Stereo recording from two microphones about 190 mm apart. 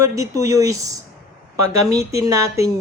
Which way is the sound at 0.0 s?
15° right (ahead or behind).